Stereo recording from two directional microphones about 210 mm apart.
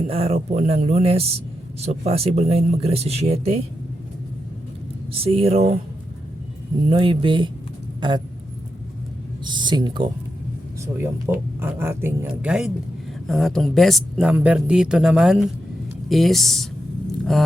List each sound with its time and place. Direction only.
0.1 s speech: 25° right (ahead or behind)
5.1 s speech: 25° right (ahead or behind)
6.8 s speech: 25° right (ahead or behind)
9.4 s speech: 20° right (ahead or behind)
11.0 s speech: 10° right (ahead or behind)